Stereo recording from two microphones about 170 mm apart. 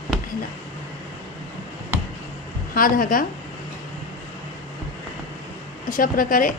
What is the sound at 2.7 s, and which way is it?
Speech, 55° left (ahead or behind).